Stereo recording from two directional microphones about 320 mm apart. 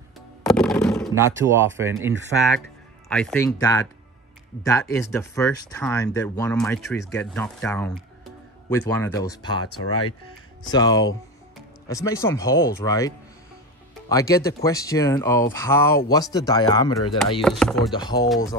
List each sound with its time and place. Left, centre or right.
0.4 s music: centre
1.1 s speech: centre
3.1 s speech: centre
9.7 s speech: left
10.7 s speech: centre
17.4 s chopping: centre
17.9 s speech: centre